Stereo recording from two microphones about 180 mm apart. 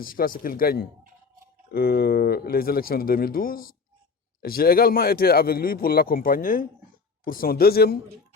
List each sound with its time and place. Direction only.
0.0 s a man's voice: 55° left (ahead or behind)